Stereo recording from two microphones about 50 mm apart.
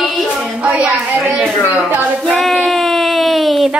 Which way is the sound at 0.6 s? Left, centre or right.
Right.